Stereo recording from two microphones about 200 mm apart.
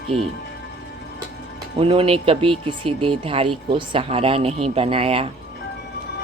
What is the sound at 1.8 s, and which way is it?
Speech, 25° right (ahead or behind).